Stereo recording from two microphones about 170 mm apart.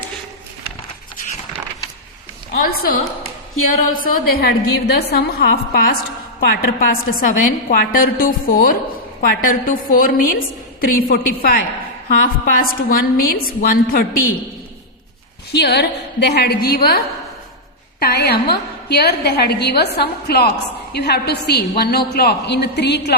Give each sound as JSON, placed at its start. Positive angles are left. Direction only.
{"t": 2.6, "sound": "a woman's voice", "side_deg": 55}
{"t": 15.5, "sound": "a woman's voice", "side_deg": 80}
{"t": 16.3, "sound": "a woman's voice", "side_deg": 70}
{"t": 18.0, "sound": "a woman's voice", "side_deg": 70}